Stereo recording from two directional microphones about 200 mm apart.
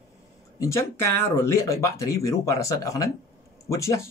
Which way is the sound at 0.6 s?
15° left (ahead or behind).